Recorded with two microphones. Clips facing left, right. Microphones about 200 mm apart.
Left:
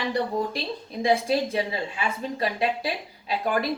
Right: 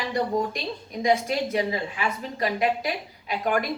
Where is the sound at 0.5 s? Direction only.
30° left (ahead or behind).